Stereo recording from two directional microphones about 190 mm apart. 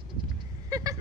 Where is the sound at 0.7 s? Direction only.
20° right (ahead or behind).